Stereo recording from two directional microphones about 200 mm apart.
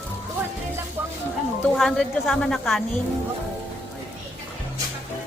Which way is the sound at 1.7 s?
Centre (ahead or behind).